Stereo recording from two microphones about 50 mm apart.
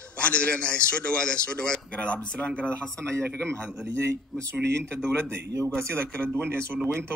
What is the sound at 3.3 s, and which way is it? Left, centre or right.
Speech, centre.